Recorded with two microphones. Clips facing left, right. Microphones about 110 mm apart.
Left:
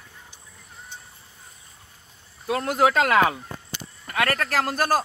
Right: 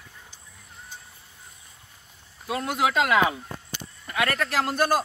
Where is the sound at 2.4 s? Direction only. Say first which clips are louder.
Left 4 dB; 45° left (ahead or behind).